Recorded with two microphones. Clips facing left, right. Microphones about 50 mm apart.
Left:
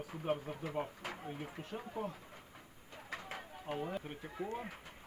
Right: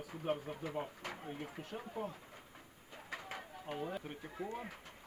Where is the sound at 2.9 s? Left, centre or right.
Centre.